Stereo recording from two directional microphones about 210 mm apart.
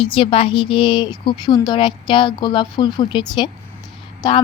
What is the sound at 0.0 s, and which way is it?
A woman's voice, 25° left (ahead or behind).